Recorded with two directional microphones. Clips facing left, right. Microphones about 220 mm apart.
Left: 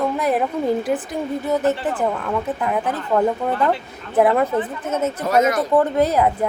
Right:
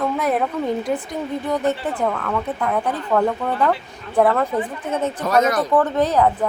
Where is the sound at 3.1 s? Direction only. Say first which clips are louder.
Left 1 dB; 20° left (ahead or behind).